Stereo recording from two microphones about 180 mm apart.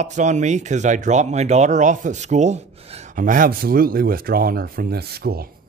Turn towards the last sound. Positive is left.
turn(degrees=-60)  # may be behind; listen again after turning